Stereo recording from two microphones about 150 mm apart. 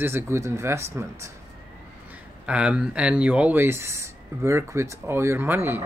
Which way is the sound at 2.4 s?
5° right (ahead or behind).